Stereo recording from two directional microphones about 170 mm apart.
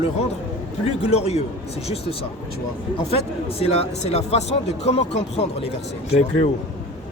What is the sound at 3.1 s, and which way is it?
Speech, 35° left (ahead or behind).